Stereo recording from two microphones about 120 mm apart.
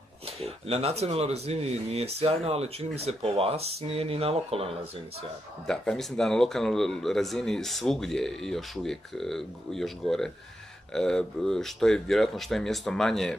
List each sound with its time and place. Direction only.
0.4 s speech: 55° right (ahead or behind)
5.7 s speech: 5° left (ahead or behind)